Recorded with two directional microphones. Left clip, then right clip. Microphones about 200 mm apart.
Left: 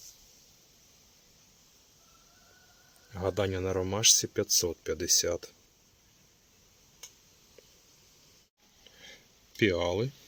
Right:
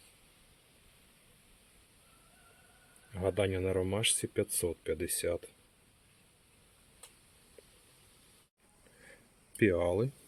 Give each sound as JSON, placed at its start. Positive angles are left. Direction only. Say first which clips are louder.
{"t": 3.1, "sound": "a man's voice", "louder": "left 1 dB", "side_deg": 5}
{"t": 9.6, "sound": "a man's voice", "louder": "left 1 dB", "side_deg": 0}